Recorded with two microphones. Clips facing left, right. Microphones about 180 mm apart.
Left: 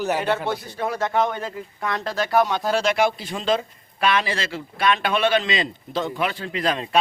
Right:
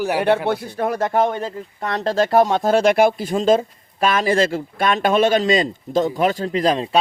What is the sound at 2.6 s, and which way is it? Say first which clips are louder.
Speech: right 6 dB; 50° right (ahead or behind).